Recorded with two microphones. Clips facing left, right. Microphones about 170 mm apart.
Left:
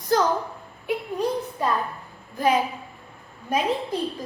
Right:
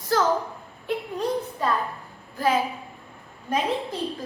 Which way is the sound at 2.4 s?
20° left (ahead or behind).